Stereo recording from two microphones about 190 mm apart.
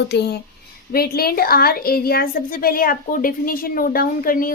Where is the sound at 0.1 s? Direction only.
60° left (ahead or behind).